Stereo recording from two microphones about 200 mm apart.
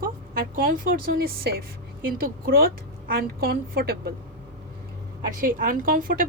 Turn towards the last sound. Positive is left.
turn(degrees=-45)  # may be behind; listen again after turning